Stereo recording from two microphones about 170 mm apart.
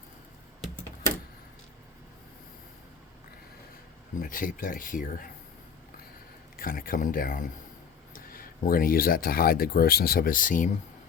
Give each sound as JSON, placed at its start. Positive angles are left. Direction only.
{"t": 4.2, "sound": "speech", "side_deg": 55}
{"t": 6.6, "sound": "speech", "side_deg": 55}